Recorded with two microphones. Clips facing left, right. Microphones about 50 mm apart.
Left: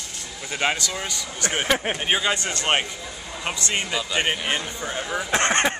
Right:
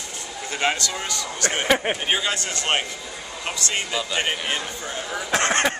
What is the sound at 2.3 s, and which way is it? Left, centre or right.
Speech, left.